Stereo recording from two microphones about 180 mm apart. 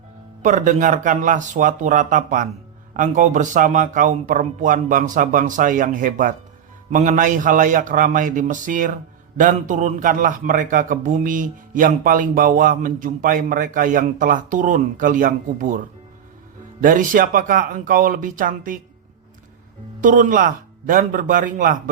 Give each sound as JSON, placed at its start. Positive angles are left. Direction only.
{"t": 0.4, "sound": "a man's voice", "side_deg": -45}
{"t": 16.8, "sound": "a man's voice", "side_deg": -50}
{"t": 20.0, "sound": "a man's voice", "side_deg": -45}